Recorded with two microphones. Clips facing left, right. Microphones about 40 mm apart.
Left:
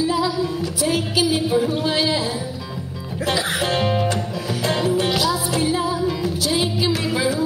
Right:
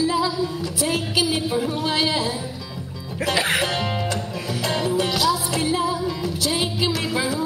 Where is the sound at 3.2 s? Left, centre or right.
Right.